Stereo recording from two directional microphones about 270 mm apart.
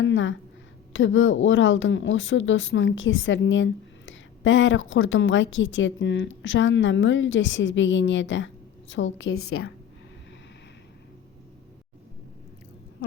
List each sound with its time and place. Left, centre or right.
0.0 s a woman's voice: left